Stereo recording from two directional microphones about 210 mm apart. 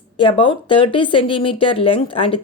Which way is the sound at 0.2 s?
25° left (ahead or behind).